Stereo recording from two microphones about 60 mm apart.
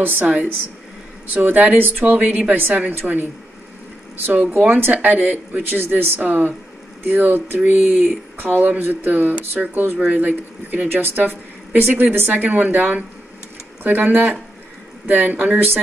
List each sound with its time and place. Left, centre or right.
0.0 s a woman's voice: right
3.0 s speech: centre
4.3 s a woman's voice: right
5.8 s a woman's voice: right